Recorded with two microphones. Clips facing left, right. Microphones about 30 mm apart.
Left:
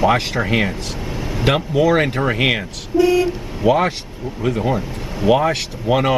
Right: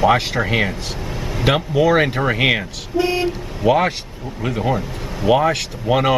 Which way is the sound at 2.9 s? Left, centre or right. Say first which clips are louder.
Left 4 dB; right.